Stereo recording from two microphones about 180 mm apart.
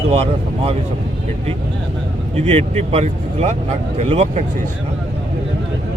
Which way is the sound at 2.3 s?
35° right (ahead or behind).